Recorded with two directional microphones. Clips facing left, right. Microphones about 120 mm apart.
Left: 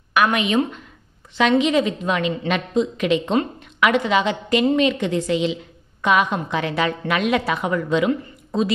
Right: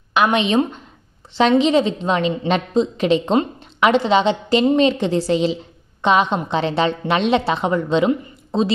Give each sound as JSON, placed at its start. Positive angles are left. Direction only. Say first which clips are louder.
{"t": 0.1, "sound": "a woman's voice", "louder": "right 2 dB", "side_deg": -25}